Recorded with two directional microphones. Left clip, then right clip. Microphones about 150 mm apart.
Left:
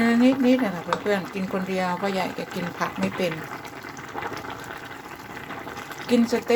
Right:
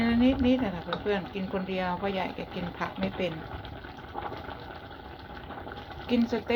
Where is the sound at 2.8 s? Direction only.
35° left (ahead or behind).